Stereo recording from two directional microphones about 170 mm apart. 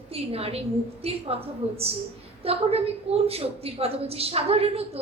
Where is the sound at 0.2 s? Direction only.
35° right (ahead or behind).